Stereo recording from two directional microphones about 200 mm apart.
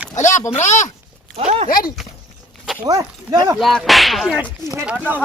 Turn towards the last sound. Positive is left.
turn(degrees=-5)  # may be behind; listen again after turning